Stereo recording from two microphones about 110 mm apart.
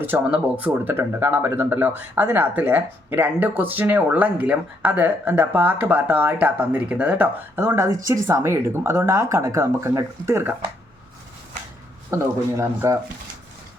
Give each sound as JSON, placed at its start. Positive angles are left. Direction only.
{"t": 0.0, "sound": "speech", "side_deg": -15}
{"t": 12.1, "sound": "speech", "side_deg": -25}